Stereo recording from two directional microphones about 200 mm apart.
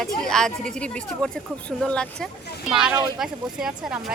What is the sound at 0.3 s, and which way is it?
Speech, 5° left (ahead or behind).